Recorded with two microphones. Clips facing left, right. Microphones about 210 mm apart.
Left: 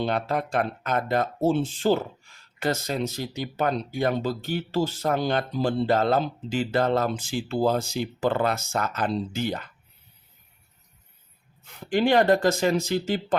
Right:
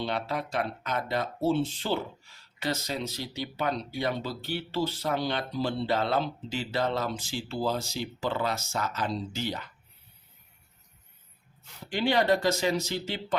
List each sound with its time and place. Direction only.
0.0 s speech: 50° left (ahead or behind)
11.7 s speech: 50° left (ahead or behind)